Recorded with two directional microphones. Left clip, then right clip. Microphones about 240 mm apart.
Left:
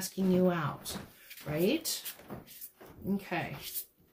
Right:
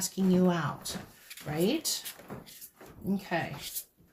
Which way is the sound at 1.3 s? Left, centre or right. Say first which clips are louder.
Right 4 dB; centre.